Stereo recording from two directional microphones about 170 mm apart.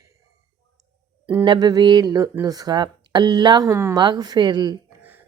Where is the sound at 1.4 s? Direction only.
25° right (ahead or behind).